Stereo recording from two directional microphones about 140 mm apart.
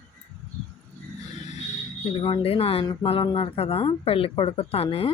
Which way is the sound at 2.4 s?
45° left (ahead or behind).